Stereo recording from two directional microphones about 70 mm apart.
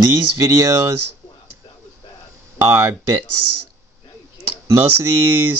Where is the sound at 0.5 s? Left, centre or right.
Right.